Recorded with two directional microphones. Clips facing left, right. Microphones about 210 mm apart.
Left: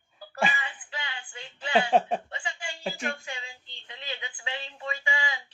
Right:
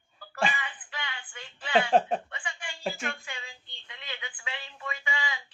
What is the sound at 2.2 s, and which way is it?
Chuckle, 25° left (ahead or behind).